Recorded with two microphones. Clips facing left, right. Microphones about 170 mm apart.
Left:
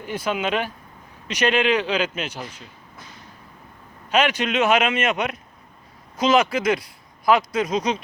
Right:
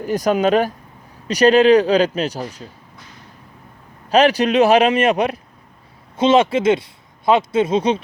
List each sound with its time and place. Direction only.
0.0 s a man's voice: 40° right (ahead or behind)
4.1 s a man's voice: 35° right (ahead or behind)